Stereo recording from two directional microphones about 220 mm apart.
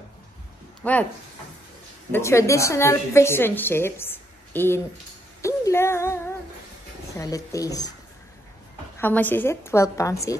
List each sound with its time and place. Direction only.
0.8 s a woman's voice: 10° left (ahead or behind)
2.1 s a woman's voice: 10° left (ahead or behind)
8.9 s a woman's voice: 10° left (ahead or behind)